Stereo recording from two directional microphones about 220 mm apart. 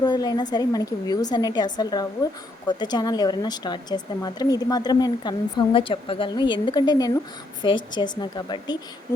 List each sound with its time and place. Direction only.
0.0 s a woman's voice: 20° left (ahead or behind)